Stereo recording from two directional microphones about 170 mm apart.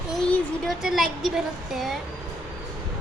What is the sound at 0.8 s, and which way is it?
Child singing, centre (ahead or behind).